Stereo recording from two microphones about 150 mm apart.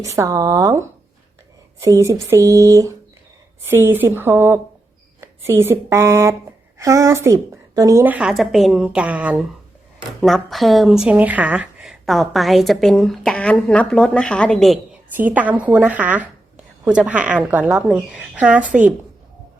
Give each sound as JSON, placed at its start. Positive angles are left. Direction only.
{"t": 0.0, "sound": "a woman's voice", "side_deg": -20}
{"t": 8.0, "sound": "a woman's voice", "side_deg": -10}
{"t": 15.1, "sound": "a woman's voice", "side_deg": -10}